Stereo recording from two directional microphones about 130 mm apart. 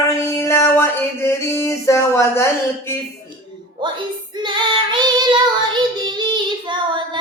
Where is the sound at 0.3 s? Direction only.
20° left (ahead or behind).